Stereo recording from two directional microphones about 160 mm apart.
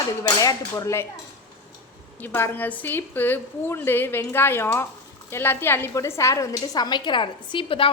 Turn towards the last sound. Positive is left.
turn(degrees=30)  # may be behind; listen again after turning